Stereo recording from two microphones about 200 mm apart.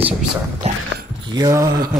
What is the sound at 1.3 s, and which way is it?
Mantra, 20° right (ahead or behind).